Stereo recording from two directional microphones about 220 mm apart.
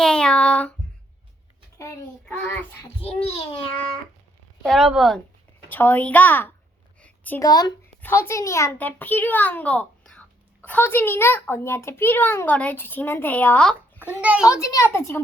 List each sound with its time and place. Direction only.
0.0 s child singing: 5° left (ahead or behind)
2.2 s a child's voice: 10° left (ahead or behind)
3.0 s a child's voice: 25° left (ahead or behind)
4.6 s a woman's voice: centre (ahead or behind)
14.2 s a woman's voice: 5° right (ahead or behind)
14.4 s a child's voice: 15° left (ahead or behind)